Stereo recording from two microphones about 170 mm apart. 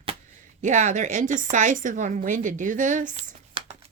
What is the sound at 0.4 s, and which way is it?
A woman's voice, 45° right (ahead or behind).